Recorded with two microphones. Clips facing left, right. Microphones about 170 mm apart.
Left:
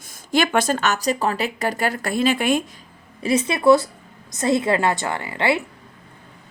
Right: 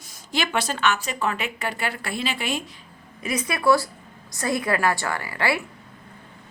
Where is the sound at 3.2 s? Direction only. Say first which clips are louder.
Left 6 dB; 30° left (ahead or behind).